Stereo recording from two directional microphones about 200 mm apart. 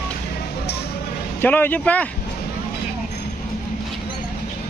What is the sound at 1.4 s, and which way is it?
Speech, 10° left (ahead or behind).